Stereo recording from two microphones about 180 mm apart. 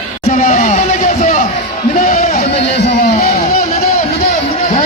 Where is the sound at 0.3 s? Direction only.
45° left (ahead or behind).